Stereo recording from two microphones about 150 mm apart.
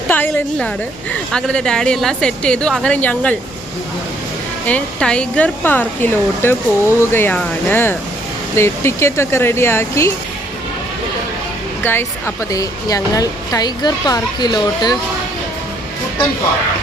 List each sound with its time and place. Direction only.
0.1 s a woman's voice: 10° left (ahead or behind)
4.6 s speech: 5° left (ahead or behind)
11.8 s speech: 15° left (ahead or behind)